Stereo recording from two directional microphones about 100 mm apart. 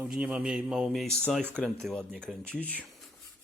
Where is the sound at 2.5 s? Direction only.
15° left (ahead or behind).